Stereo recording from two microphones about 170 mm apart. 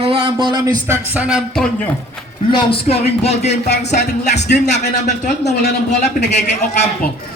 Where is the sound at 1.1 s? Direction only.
5° right (ahead or behind).